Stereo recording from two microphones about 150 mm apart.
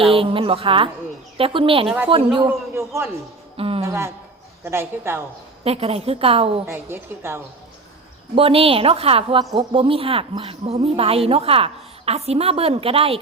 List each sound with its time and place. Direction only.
0.0 s a woman's voice: 40° right (ahead or behind)
2.5 s a woman's voice: 20° right (ahead or behind)
3.6 s a woman's voice: 40° right (ahead or behind)
3.8 s a woman's voice: 20° right (ahead or behind)
5.6 s a woman's voice: 40° right (ahead or behind)
6.7 s a woman's voice: 15° right (ahead or behind)
8.4 s a woman's voice: 40° right (ahead or behind)
9.4 s speech: 25° right (ahead or behind)
9.7 s a woman's voice: 40° right (ahead or behind)